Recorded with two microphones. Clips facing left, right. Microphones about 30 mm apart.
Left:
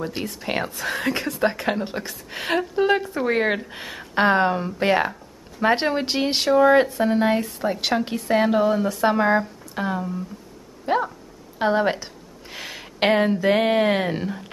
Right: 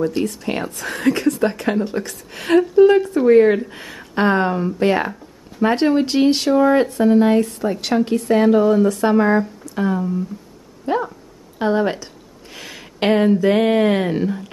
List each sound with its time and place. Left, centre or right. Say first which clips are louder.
0.1 s a woman's voice: right 5 dB; centre